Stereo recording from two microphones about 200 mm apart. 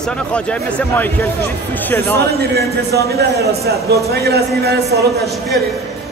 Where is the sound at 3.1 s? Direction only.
50° right (ahead or behind).